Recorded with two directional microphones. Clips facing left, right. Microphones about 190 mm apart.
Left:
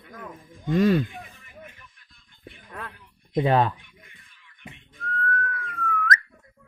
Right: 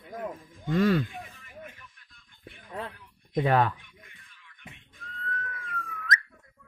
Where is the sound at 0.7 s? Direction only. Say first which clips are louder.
Left 3 dB; 20° left (ahead or behind).